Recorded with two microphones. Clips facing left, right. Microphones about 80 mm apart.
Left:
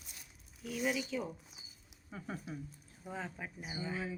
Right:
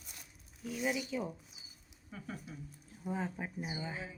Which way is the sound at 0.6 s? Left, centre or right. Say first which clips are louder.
Even; right.